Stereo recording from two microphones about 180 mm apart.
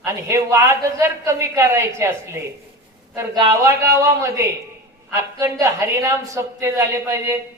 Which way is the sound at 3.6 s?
15° right (ahead or behind).